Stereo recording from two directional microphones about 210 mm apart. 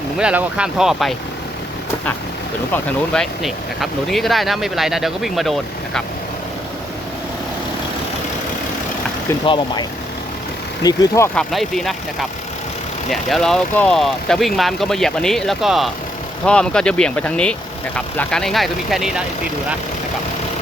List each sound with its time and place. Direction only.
0.2 s speech: 5° right (ahead or behind)
2.7 s speech: 5° left (ahead or behind)
10.8 s speech: 15° left (ahead or behind)
11.3 s speech: centre (ahead or behind)
13.1 s speech: centre (ahead or behind)